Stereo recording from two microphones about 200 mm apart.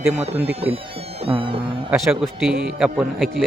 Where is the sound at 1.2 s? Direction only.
25° right (ahead or behind).